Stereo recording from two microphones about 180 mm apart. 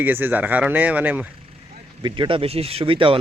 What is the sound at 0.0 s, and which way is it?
Speech, 10° right (ahead or behind).